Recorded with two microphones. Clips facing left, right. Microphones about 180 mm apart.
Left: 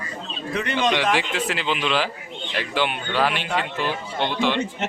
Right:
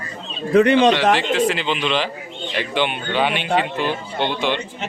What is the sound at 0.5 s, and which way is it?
Speech, 60° right (ahead or behind).